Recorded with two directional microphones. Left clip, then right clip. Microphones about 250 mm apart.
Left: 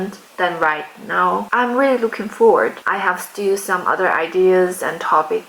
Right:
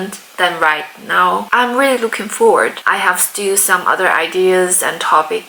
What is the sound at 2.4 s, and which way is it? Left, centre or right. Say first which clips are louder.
Speech: right 2 dB; centre.